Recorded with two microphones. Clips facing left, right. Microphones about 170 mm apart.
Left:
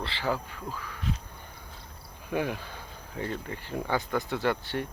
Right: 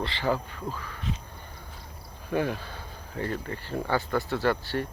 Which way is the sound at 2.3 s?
15° left (ahead or behind).